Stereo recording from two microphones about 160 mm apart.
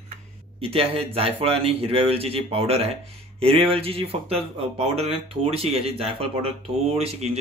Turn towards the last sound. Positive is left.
turn(degrees=-40)  # may be behind; listen again after turning